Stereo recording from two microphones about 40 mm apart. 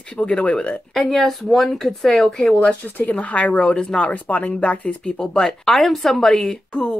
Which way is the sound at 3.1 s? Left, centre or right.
Left.